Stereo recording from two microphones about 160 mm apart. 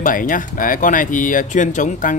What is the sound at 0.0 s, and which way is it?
Speech, 60° left (ahead or behind).